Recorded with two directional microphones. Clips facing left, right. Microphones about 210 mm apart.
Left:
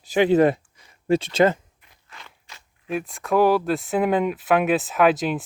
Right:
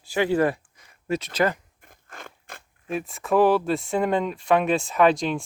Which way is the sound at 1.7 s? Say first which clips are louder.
Right 4 dB; 50° right (ahead or behind).